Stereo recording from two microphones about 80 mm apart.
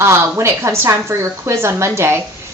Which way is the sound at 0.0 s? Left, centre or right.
Right.